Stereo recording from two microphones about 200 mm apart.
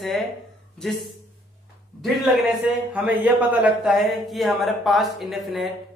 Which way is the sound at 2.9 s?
10° right (ahead or behind).